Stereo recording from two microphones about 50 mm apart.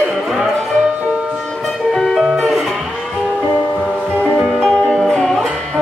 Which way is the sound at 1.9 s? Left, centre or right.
Centre.